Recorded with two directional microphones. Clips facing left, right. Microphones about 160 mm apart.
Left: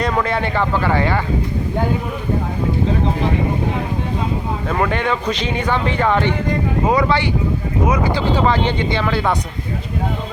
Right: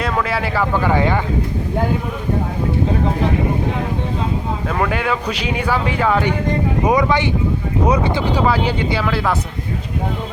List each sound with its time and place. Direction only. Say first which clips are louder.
0.0 s speech: left 1 dB; centre (ahead or behind)
4.9 s speech: left 1 dB; 5° right (ahead or behind)
6.8 s speech: right 1 dB; 20° right (ahead or behind)
7.9 s speech: right 2 dB; 30° right (ahead or behind)
8.3 s speech: left 1 dB; 10° right (ahead or behind)